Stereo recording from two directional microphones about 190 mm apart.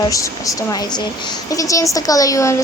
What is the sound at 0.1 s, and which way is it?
A woman's voice, 20° left (ahead or behind).